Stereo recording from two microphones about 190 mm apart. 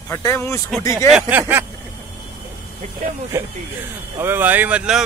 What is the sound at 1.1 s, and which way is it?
Speech, 10° right (ahead or behind).